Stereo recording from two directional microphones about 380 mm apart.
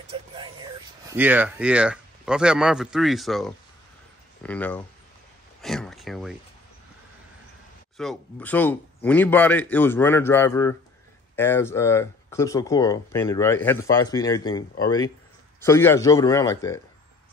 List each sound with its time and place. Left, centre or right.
0.1 s a man's voice: centre
5.6 s a sound: centre
8.0 s a man's voice: centre